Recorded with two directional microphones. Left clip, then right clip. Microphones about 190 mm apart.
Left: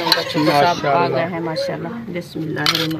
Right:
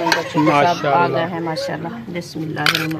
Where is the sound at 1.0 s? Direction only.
25° right (ahead or behind).